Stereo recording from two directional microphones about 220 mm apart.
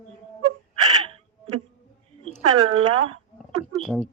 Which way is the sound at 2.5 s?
85° right.